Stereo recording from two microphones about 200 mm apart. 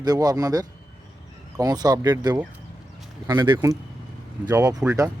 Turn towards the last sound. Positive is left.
turn(degrees=-15)  # may be behind; listen again after turning